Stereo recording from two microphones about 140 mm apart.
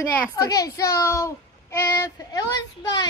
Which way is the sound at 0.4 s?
25° left (ahead or behind).